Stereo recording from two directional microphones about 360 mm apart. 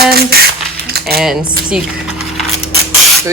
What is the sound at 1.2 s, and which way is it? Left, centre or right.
Speech, centre.